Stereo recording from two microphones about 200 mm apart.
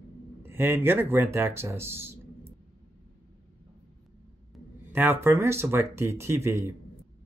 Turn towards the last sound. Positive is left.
turn(degrees=-15)  # may be behind; listen again after turning